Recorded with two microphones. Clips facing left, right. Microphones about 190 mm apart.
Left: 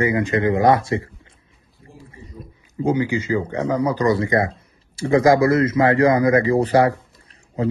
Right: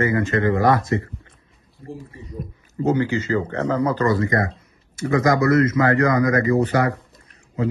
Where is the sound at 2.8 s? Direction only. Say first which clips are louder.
Even; 10° left (ahead or behind).